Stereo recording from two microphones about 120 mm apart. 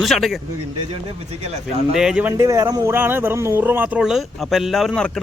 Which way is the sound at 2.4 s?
25° right (ahead or behind).